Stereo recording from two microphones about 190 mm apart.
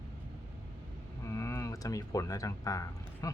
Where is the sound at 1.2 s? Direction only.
15° left (ahead or behind).